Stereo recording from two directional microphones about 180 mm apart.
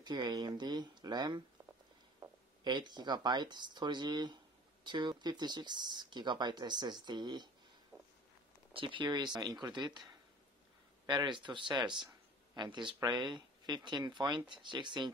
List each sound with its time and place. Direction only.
0.0 s speech: 25° right (ahead or behind)
2.6 s speech: 25° right (ahead or behind)
8.7 s speech: 25° right (ahead or behind)
11.1 s speech: 25° right (ahead or behind)